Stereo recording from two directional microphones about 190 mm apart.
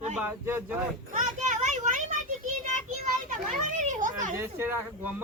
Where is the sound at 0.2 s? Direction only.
10° right (ahead or behind).